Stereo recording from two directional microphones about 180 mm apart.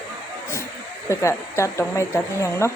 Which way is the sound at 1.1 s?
15° left (ahead or behind).